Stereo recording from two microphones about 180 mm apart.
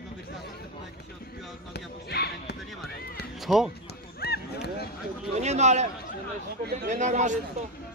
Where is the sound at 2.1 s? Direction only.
65° left (ahead or behind).